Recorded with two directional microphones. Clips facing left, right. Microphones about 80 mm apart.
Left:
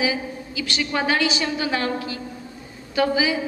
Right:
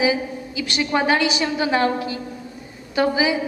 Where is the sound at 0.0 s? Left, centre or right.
Right.